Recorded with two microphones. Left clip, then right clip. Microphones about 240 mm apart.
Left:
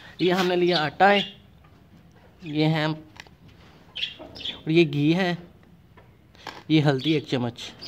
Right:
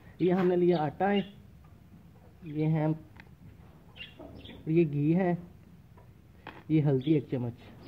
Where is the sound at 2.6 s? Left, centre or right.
Left.